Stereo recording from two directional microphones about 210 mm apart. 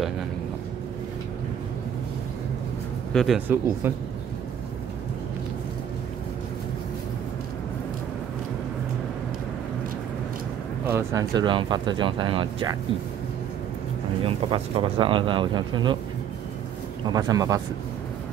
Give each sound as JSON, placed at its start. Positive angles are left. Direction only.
{"t": 3.1, "sound": "speech", "side_deg": 0}
{"t": 10.9, "sound": "speech", "side_deg": -10}
{"t": 14.2, "sound": "speech", "side_deg": -25}
{"t": 17.1, "sound": "speech", "side_deg": -15}